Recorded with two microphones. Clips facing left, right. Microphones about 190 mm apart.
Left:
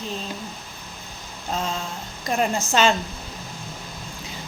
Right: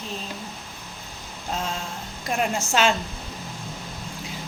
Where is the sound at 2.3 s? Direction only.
5° right (ahead or behind).